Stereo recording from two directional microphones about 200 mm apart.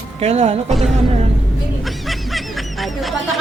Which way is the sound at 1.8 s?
Centre (ahead or behind).